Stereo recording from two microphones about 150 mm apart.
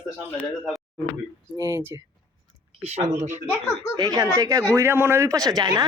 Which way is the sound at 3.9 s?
25° right (ahead or behind).